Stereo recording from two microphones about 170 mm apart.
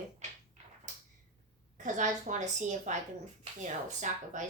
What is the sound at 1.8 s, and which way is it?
Speech, 45° right (ahead or behind).